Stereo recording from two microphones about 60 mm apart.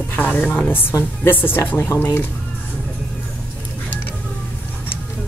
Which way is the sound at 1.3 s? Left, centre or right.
Left.